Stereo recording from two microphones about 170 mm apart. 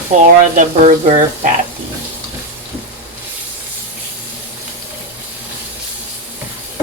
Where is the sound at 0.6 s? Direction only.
45° right (ahead or behind).